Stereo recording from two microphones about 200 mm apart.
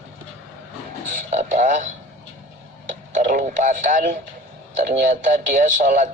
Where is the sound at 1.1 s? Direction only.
35° right (ahead or behind).